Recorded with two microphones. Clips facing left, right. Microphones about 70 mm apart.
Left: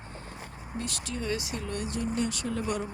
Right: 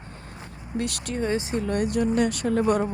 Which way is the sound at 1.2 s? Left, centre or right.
Right.